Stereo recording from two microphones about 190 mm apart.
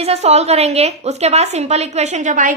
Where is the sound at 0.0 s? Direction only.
35° right (ahead or behind).